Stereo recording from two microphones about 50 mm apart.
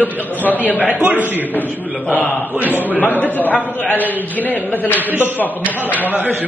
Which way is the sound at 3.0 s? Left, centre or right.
Left.